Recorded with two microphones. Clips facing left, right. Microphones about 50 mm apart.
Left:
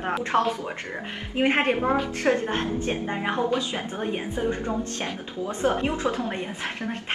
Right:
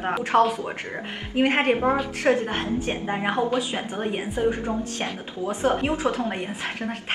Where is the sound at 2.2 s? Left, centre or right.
Right.